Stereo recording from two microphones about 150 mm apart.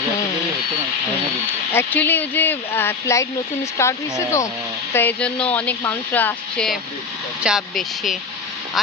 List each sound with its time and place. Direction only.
1.7 s speech: 15° left (ahead or behind)
7.4 s speech: centre (ahead or behind)